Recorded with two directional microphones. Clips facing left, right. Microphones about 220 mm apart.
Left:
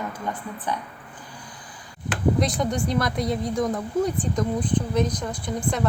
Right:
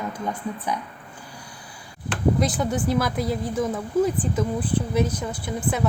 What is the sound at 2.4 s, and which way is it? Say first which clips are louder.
Speech: even; 5° right (ahead or behind).